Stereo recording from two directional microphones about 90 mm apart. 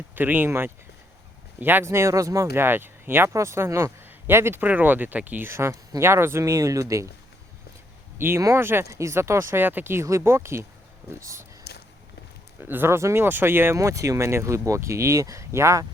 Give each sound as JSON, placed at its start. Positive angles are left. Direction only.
{"t": 0.2, "sound": "speech", "side_deg": -20}
{"t": 2.6, "sound": "speech", "side_deg": -25}
{"t": 5.5, "sound": "speech", "side_deg": -30}
{"t": 8.2, "sound": "speech", "side_deg": -25}
{"t": 12.5, "sound": "speech", "side_deg": -25}